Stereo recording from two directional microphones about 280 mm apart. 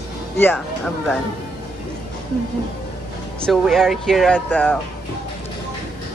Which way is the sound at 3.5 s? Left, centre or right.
Centre.